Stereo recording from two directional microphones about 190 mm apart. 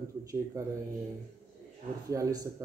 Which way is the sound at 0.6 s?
15° right (ahead or behind).